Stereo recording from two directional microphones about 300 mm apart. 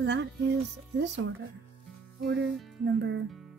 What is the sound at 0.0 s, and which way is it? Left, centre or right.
Music, right.